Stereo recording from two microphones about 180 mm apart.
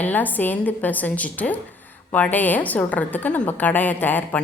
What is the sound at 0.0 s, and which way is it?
Speech, 10° left (ahead or behind).